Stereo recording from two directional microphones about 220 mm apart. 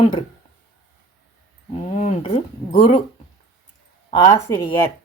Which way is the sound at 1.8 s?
30° left (ahead or behind).